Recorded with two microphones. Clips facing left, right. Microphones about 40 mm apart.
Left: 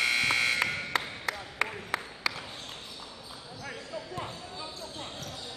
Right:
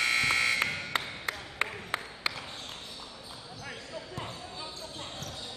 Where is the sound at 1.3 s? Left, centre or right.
Right.